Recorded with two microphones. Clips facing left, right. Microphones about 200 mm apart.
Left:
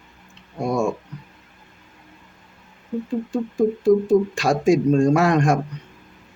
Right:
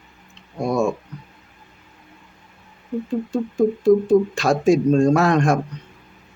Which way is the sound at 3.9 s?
10° left (ahead or behind).